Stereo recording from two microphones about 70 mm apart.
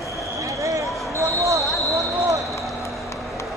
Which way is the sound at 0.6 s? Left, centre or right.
Right.